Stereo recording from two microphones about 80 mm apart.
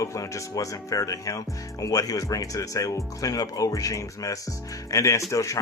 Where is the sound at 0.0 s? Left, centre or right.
Left.